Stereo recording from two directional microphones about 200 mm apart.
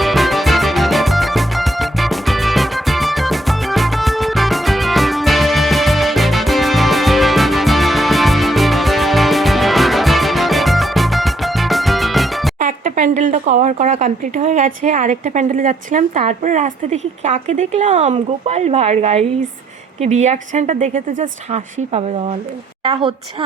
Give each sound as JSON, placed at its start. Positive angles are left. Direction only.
{"t": 0.0, "sound": "music", "side_deg": 0}
{"t": 12.5, "sound": "a woman's voice", "side_deg": -40}